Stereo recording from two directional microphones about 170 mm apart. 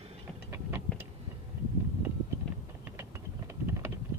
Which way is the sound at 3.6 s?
15° right (ahead or behind).